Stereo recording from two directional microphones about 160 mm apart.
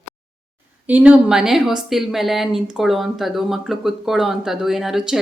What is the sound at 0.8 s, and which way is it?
Speech, 10° right (ahead or behind).